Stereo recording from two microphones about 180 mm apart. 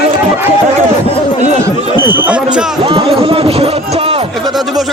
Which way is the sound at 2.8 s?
30° right (ahead or behind).